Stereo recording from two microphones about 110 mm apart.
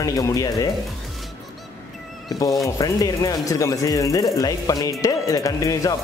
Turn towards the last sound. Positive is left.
turn(degrees=30)  # may be behind; listen again after turning